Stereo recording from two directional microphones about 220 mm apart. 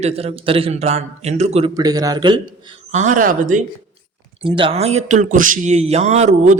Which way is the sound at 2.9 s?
35° right (ahead or behind).